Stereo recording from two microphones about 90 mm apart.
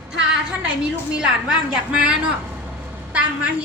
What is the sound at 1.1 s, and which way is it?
A woman's voice, 10° right (ahead or behind).